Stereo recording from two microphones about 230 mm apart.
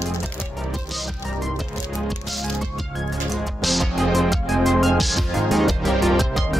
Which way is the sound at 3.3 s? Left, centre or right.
Centre.